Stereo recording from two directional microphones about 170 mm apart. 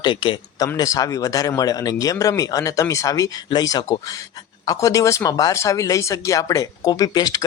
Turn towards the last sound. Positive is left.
turn(degrees=20)  # may be behind; listen again after turning